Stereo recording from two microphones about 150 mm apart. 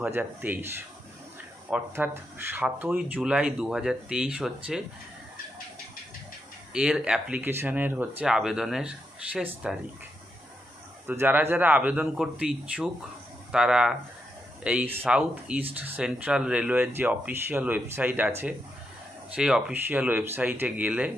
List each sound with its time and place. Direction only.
0.0 s speech: 10° right (ahead or behind)
6.7 s speech: 5° right (ahead or behind)
11.1 s speech: 10° right (ahead or behind)
19.3 s speech: 5° right (ahead or behind)